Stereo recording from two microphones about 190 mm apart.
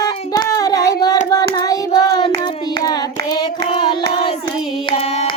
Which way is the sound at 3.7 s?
25° left (ahead or behind).